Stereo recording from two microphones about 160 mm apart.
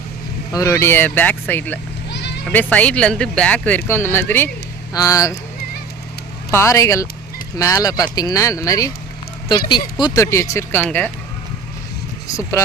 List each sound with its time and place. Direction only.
0.5 s speech: 20° left (ahead or behind)
2.0 s sheep: 90° left
2.5 s speech: 10° left (ahead or behind)
6.5 s speech: 20° left (ahead or behind)
10.0 s speech: 20° left (ahead or behind)
12.3 s speech: 20° left (ahead or behind)